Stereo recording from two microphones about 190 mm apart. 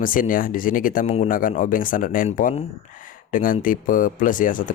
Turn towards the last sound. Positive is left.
turn(degrees=45)  # may be behind; listen again after turning